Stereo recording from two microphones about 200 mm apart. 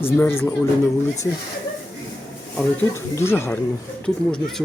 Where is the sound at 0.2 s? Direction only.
10° left (ahead or behind).